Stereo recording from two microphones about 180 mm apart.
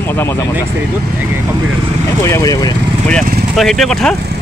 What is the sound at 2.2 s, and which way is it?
Speech, 20° left (ahead or behind).